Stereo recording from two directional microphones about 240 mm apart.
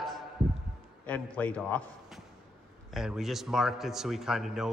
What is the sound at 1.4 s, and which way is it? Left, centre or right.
A man's voice, centre.